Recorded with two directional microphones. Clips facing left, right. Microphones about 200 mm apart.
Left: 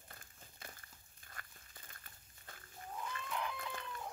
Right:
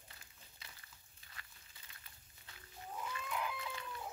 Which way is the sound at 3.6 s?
50° left (ahead or behind).